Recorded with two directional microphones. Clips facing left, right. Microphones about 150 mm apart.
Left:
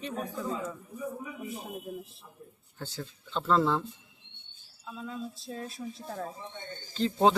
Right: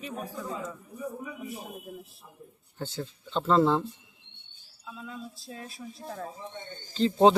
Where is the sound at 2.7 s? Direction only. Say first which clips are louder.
Right 4 dB; 25° right (ahead or behind).